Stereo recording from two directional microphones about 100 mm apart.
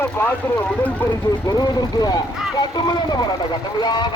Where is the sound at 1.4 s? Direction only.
40° left (ahead or behind).